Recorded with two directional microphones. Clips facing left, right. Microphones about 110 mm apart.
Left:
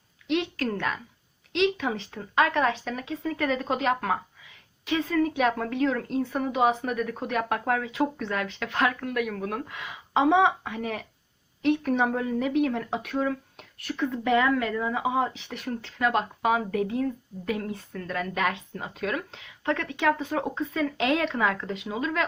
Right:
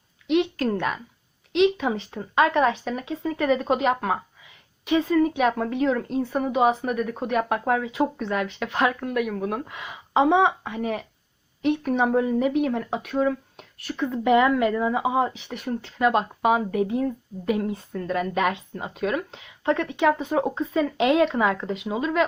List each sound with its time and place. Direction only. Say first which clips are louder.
0.6 s a woman's voice: right 4 dB; 15° right (ahead or behind)
14.1 s speech: right 5 dB; 15° right (ahead or behind)